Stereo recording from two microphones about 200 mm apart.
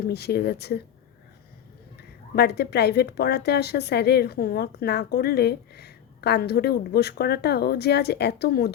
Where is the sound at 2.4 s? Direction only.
55° left (ahead or behind).